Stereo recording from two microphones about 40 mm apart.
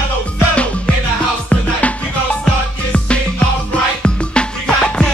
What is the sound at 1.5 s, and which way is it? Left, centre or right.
Music, left.